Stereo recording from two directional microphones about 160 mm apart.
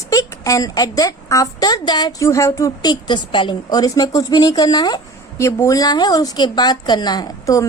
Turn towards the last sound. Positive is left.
turn(degrees=20)  # may be behind; listen again after turning